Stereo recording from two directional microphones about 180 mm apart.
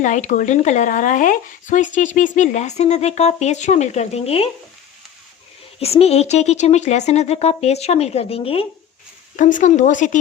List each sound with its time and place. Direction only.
0.0 s speech: 40° left (ahead or behind)
5.8 s speech: 35° left (ahead or behind)
9.3 s speech: 45° left (ahead or behind)